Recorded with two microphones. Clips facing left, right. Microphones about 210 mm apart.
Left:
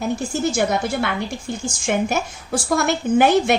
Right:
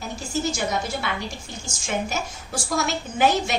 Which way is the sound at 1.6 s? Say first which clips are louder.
Left 6 dB; 55° left (ahead or behind).